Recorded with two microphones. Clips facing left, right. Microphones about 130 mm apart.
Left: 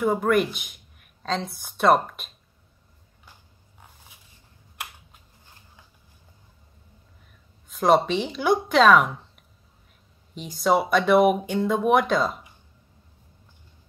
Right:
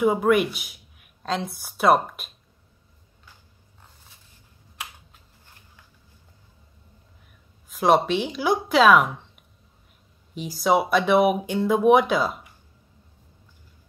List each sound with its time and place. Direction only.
0.0 s speech: 5° right (ahead or behind)
3.8 s dog: 10° left (ahead or behind)
7.7 s speech: centre (ahead or behind)
10.3 s speech: 5° right (ahead or behind)